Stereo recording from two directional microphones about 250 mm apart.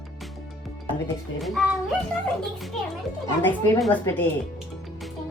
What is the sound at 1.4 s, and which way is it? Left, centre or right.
Speech, centre.